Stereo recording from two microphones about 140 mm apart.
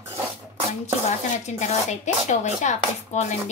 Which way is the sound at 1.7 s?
55° left (ahead or behind).